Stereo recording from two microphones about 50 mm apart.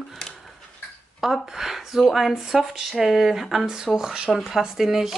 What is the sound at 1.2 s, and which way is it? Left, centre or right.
Speech, centre.